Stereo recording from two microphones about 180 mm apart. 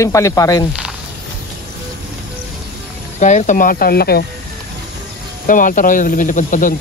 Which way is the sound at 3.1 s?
40° left (ahead or behind).